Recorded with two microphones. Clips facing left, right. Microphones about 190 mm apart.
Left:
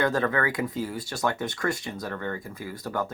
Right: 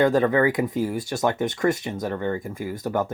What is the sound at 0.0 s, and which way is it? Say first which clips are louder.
Speech: right 6 dB; 20° right (ahead or behind).